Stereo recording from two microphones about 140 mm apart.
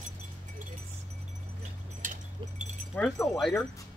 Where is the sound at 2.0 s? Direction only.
60° right (ahead or behind).